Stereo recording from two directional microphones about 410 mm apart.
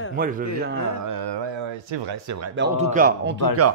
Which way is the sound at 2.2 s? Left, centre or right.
Right.